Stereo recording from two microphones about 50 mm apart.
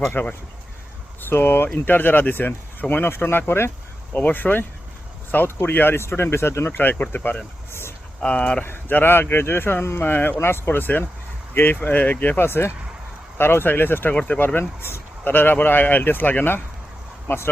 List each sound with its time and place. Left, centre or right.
0.1 s speech: left
1.3 s speech: left
4.1 s speech: left
7.7 s a sound: left
8.2 s speech: left
8.6 s speech: left
10.0 s speech: left
12.4 s speech: left
14.6 s speech: left
15.2 s speech: left
17.2 s speech: left